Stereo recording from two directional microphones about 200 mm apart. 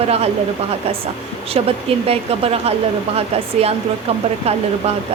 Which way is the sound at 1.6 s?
30° right (ahead or behind).